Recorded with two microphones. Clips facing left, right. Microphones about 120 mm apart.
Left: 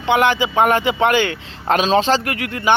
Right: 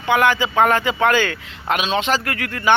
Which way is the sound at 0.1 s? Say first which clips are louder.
Left 1 dB; 20° left (ahead or behind).